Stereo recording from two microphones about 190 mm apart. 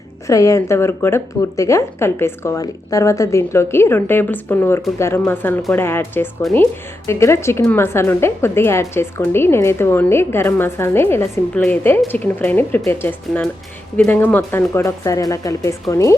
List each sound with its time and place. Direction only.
0.3 s speech: 15° left (ahead or behind)